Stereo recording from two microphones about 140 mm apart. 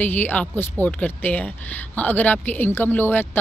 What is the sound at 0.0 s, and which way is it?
A woman's voice, 15° left (ahead or behind).